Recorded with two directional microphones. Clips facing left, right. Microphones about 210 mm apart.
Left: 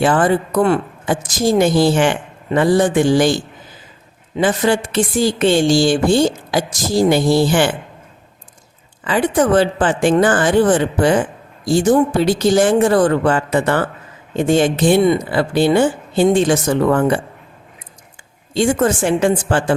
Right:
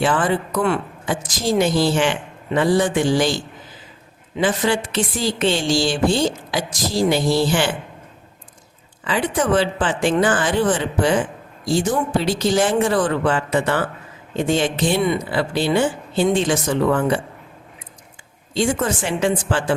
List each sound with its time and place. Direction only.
0.0 s a woman's voice: 45° left (ahead or behind)
9.0 s a woman's voice: 50° left (ahead or behind)
18.5 s a woman's voice: 50° left (ahead or behind)